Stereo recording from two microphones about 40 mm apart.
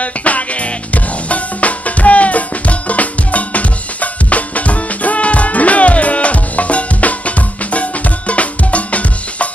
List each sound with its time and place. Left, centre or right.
0.0 s music: left